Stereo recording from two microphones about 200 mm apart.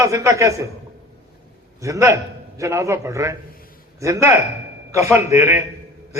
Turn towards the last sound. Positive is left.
turn(degrees=-15)  # may be behind; listen again after turning